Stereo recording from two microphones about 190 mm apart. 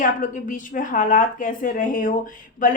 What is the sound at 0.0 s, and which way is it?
A woman's voice, 45° left (ahead or behind).